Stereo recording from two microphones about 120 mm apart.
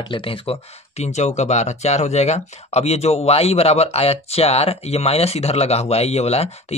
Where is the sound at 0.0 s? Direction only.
45° left (ahead or behind).